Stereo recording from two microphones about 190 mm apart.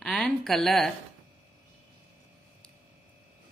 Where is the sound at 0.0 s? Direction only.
5° left (ahead or behind).